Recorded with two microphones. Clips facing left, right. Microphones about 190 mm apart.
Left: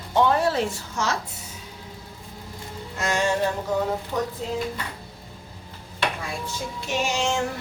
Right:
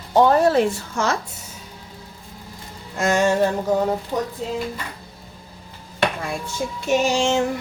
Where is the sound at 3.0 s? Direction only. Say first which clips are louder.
Right 6 dB; 50° right (ahead or behind).